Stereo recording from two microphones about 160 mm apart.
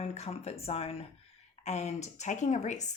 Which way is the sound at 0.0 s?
40° left (ahead or behind).